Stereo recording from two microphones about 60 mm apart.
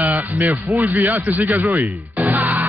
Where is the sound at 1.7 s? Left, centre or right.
Right.